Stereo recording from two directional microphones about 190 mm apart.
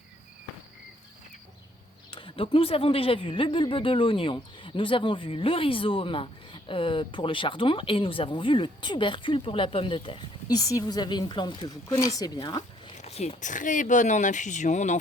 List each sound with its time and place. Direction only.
2.0 s speech: 30° left (ahead or behind)
13.0 s speech: 35° left (ahead or behind)